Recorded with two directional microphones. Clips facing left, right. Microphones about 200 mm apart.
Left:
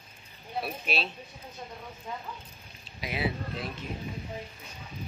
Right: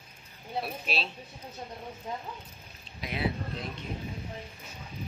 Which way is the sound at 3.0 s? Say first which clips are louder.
Even; 5° left (ahead or behind).